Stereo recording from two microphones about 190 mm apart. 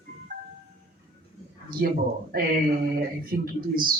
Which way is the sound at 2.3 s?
50° right (ahead or behind).